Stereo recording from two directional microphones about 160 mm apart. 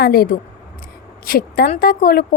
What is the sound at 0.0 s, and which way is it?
A woman's voice, 70° left (ahead or behind).